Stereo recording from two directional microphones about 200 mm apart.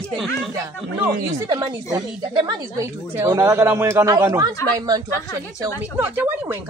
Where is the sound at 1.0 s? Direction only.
20° right (ahead or behind).